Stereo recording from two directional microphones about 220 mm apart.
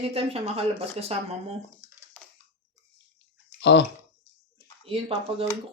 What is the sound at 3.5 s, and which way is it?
Bathtub, 50° left (ahead or behind).